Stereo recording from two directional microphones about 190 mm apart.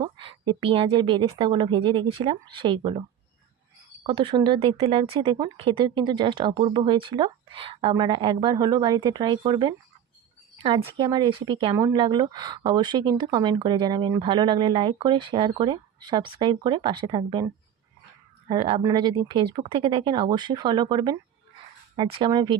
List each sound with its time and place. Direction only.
0.0 s speech: 25° right (ahead or behind)
4.0 s speech: 25° right (ahead or behind)